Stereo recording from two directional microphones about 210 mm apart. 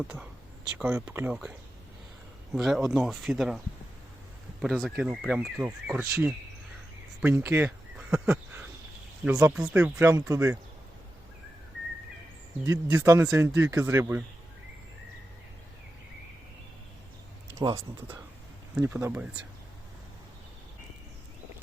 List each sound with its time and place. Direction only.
0.0 s speech: 5° right (ahead or behind)
4.6 s speech: centre (ahead or behind)
12.6 s speech: 15° right (ahead or behind)
17.6 s speech: 20° right (ahead or behind)
18.7 s speech: 5° right (ahead or behind)